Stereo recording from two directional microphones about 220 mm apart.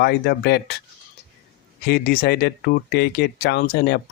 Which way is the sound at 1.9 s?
45° left (ahead or behind).